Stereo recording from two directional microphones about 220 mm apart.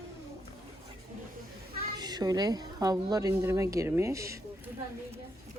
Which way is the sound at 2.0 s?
20° right (ahead or behind).